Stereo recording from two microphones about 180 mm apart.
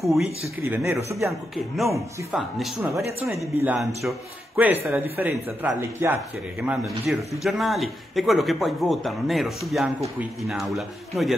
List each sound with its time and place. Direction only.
0.0 s a man's voice: centre (ahead or behind)
0.7 s speech: 15° right (ahead or behind)
1.8 s a man's voice: centre (ahead or behind)